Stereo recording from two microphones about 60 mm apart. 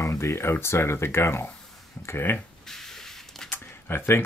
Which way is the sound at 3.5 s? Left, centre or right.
Left.